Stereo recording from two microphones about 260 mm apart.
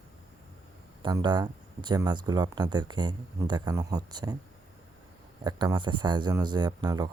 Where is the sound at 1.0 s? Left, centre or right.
Centre.